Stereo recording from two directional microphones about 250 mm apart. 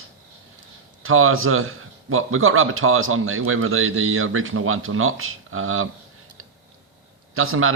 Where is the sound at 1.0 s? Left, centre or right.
Right.